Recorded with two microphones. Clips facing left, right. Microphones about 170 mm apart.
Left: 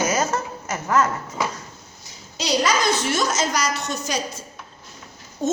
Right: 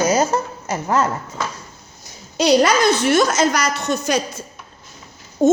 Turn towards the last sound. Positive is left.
turn(degrees=-50)  # may be behind; listen again after turning